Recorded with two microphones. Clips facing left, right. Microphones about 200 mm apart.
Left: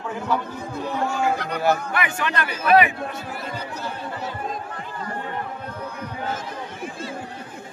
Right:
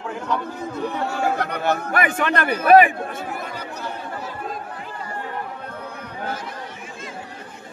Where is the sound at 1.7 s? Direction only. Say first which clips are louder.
Right 1 dB; 55° right (ahead or behind).